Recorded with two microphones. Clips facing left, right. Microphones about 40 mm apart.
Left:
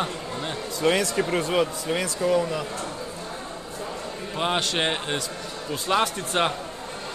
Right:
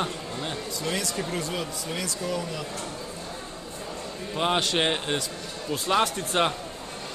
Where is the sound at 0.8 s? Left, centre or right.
Left.